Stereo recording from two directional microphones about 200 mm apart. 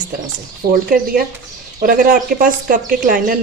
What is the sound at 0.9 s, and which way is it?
A woman's voice, 45° right (ahead or behind).